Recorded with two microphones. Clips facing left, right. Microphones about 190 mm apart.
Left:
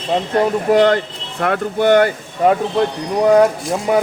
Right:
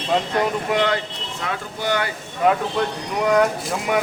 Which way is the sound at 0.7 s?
45° left (ahead or behind).